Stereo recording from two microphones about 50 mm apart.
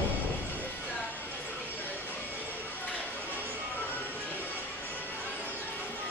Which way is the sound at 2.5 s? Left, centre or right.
Left.